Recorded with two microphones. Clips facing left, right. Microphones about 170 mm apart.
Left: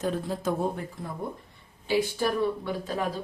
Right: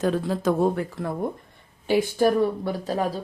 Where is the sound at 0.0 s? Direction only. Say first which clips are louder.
Right 6 dB; 90° right.